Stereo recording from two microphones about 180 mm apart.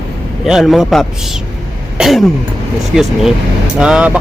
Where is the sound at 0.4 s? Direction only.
Centre (ahead or behind).